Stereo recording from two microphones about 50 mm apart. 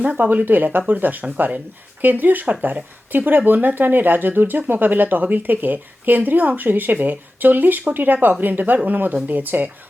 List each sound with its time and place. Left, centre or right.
0.0 s a woman's voice: right